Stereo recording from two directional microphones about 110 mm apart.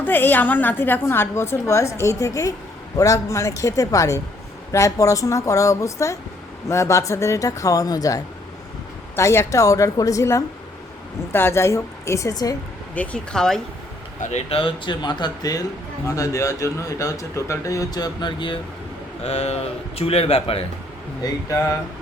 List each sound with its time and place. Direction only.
0.0 s a woman's voice: 20° left (ahead or behind); by 12.5 s 35° left (ahead or behind)
12.9 s speech: 15° left (ahead or behind)
14.3 s speech: 90° left
14.6 s a woman's voice: 45° left (ahead or behind)
19.2 s speech: 65° left (ahead or behind)